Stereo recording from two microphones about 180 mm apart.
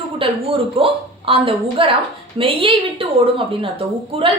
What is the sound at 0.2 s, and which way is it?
A woman's voice, 30° right (ahead or behind).